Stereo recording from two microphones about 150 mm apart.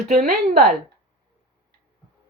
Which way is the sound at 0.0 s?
90° right.